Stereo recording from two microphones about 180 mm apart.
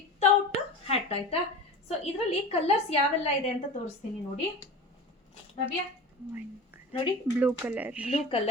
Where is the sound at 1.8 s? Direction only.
35° left (ahead or behind).